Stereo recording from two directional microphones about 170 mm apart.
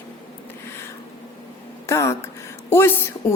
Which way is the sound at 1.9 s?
15° left (ahead or behind).